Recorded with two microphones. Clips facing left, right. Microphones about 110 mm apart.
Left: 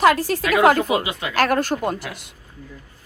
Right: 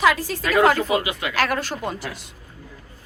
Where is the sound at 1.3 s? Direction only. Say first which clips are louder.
Left 5 dB; 45° left (ahead or behind).